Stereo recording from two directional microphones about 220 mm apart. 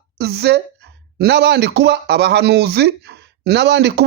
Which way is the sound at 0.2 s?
50° right (ahead or behind).